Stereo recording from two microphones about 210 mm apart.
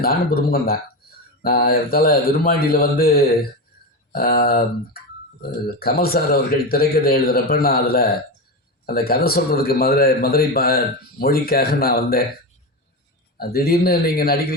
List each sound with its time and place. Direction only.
0.0 s a man's voice: 45° left (ahead or behind)
5.8 s a man's voice: 45° left (ahead or behind)
13.4 s a man's voice: 45° left (ahead or behind)